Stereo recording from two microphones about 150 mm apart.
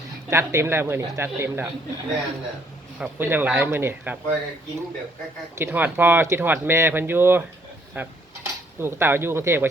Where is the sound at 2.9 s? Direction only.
15° right (ahead or behind).